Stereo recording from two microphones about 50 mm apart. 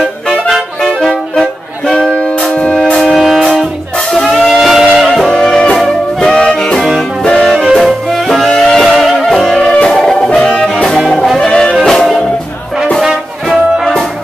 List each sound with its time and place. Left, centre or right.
0.5 s music: centre
2.8 s music: centre
3.2 s music: centre
4.1 s music: centre
4.4 s music: centre
5.3 s music: centre
7.7 s music: centre
9.6 s music: centre
11.3 s music: centre
13.5 s music: centre